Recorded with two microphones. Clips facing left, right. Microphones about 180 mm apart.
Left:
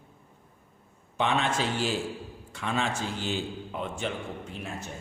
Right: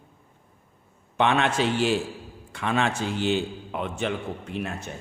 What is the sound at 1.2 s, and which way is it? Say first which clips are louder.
A man's voice: right 5 dB; 65° right (ahead or behind).